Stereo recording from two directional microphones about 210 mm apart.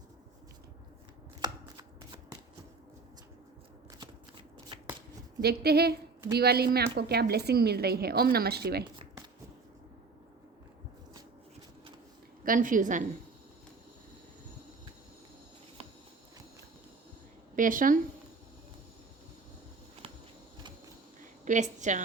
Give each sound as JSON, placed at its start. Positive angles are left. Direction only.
{"t": 4.7, "sound": "shuffling cards", "side_deg": -25}
{"t": 5.4, "sound": "a woman's voice", "side_deg": -50}
{"t": 12.5, "sound": "a woman's voice", "side_deg": -40}
{"t": 17.5, "sound": "a woman's voice", "side_deg": -40}
{"t": 21.4, "sound": "a woman's voice", "side_deg": -35}